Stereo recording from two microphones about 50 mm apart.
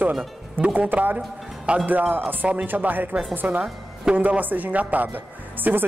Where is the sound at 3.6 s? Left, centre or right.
Right.